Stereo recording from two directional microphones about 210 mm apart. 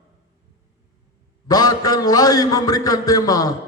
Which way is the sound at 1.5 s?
20° left (ahead or behind).